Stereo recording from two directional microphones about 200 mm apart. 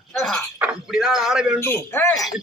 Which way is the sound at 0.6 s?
Centre (ahead or behind).